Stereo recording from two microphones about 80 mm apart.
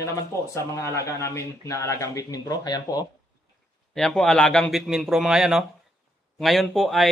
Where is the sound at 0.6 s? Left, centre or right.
Left.